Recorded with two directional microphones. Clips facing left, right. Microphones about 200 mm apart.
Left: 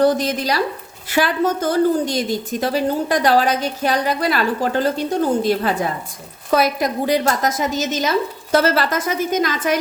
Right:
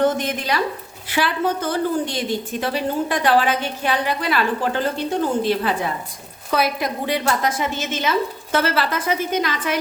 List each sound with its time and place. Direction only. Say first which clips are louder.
0.0 s a woman's voice: left 3 dB; 35° left (ahead or behind)